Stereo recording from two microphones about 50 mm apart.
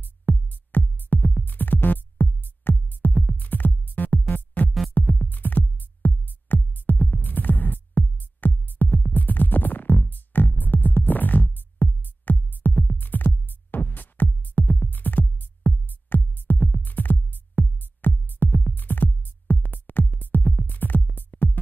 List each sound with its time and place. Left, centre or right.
0.0 s music: left